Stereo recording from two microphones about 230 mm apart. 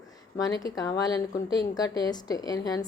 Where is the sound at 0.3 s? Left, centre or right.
Centre.